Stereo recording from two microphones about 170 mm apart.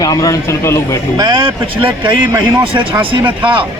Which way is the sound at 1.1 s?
25° right (ahead or behind).